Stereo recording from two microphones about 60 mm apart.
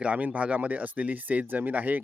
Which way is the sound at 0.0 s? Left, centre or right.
Right.